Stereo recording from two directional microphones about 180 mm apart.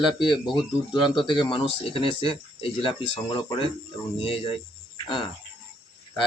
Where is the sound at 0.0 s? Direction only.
25° left (ahead or behind).